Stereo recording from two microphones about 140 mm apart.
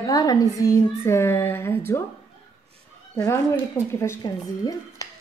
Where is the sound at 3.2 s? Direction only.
20° left (ahead or behind).